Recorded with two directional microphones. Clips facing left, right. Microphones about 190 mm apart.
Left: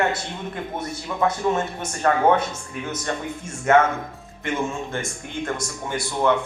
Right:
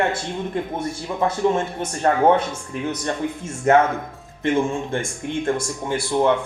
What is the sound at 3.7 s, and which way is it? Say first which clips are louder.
Speech: right 1 dB; 35° right (ahead or behind).